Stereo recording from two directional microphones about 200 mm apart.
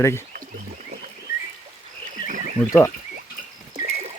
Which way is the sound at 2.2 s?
40° right (ahead or behind).